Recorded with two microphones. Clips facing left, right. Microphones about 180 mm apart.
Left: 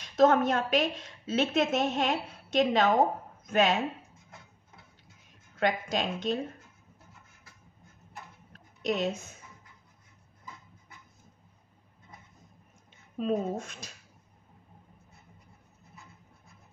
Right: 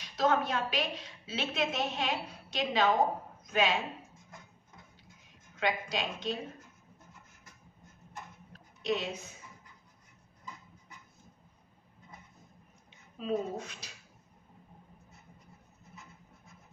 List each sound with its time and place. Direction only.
0.0 s a woman's voice: 50° left (ahead or behind)
5.6 s a woman's voice: 50° left (ahead or behind)
8.8 s a woman's voice: 50° left (ahead or behind)
13.2 s a woman's voice: 50° left (ahead or behind)